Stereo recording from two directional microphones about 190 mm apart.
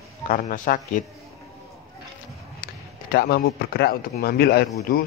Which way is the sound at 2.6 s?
55° left (ahead or behind).